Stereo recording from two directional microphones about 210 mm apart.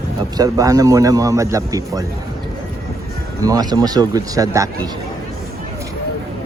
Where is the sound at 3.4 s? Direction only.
15° right (ahead or behind).